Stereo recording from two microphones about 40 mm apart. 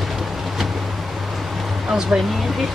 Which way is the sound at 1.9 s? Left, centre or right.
Centre.